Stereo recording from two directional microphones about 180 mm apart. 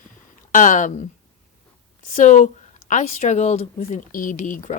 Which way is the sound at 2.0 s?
45° left (ahead or behind).